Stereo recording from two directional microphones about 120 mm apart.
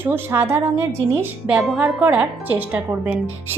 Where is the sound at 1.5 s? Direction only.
5° right (ahead or behind).